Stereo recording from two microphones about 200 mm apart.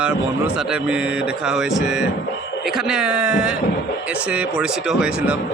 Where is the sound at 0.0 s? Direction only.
5° right (ahead or behind).